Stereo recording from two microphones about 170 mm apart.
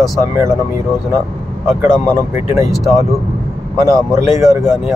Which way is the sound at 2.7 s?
Centre (ahead or behind).